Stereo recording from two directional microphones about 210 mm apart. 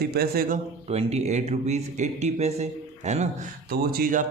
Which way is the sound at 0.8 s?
30° right (ahead or behind).